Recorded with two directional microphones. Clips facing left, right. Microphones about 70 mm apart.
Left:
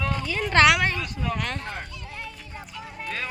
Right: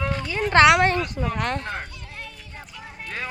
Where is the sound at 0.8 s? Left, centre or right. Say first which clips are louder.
Right 6 dB; right.